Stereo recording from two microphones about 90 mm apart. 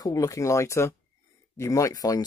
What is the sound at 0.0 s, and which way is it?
Speech, 40° left (ahead or behind).